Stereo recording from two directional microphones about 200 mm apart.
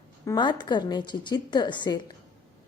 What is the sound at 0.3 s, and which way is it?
A woman's voice, 20° left (ahead or behind).